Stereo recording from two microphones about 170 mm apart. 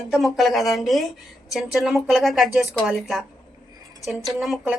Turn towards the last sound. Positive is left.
turn(degrees=0)  # may be behind; listen again after turning